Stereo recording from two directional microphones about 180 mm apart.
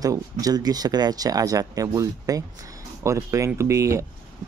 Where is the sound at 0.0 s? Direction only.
20° right (ahead or behind).